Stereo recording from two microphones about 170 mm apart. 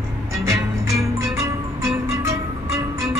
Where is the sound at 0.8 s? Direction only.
15° right (ahead or behind).